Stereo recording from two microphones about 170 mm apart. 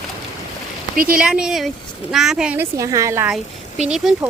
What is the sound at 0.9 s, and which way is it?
Speech, 60° right (ahead or behind).